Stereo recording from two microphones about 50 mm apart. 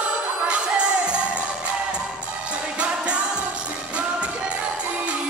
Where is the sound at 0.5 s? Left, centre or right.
Right.